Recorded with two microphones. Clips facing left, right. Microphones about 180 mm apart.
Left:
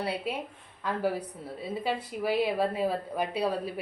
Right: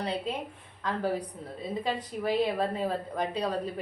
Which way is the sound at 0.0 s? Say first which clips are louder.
Even; 10° left (ahead or behind).